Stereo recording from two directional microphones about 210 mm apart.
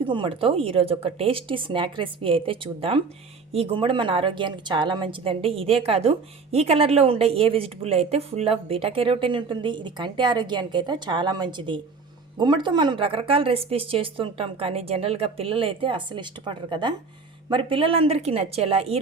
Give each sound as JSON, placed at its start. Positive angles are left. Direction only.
{"t": 0.0, "sound": "a woman's voice", "side_deg": -25}